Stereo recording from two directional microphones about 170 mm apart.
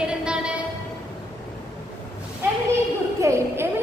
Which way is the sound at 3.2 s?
15° right (ahead or behind).